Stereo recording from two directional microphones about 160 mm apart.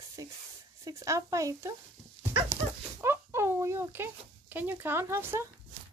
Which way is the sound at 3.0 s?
15° right (ahead or behind).